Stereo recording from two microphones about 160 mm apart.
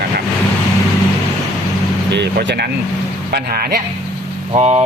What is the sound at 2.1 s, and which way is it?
Speech, 90° right.